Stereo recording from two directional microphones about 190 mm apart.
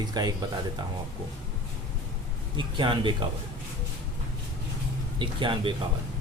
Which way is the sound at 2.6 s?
25° right (ahead or behind).